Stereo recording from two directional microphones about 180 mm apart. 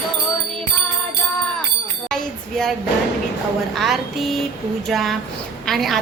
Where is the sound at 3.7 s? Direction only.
Centre (ahead or behind).